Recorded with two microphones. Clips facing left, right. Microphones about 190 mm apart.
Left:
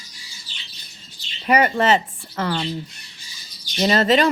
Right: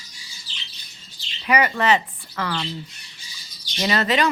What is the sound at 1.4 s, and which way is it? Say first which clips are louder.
Speech: left 3 dB; 45° left (ahead or behind).